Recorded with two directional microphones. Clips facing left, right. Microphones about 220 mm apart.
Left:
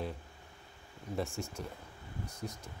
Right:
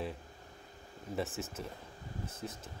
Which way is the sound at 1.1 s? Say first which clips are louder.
Even; centre (ahead or behind).